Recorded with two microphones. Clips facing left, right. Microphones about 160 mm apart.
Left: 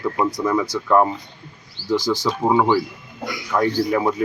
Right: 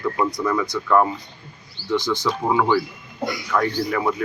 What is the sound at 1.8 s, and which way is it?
Bird, 90° left.